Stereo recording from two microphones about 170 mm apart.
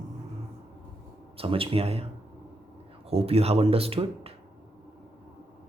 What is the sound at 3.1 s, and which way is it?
Speech, 35° right (ahead or behind).